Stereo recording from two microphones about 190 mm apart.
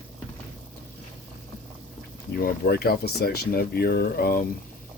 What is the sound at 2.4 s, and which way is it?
Speech, 55° left (ahead or behind).